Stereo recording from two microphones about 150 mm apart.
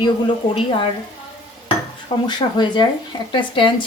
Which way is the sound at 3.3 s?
30° left (ahead or behind).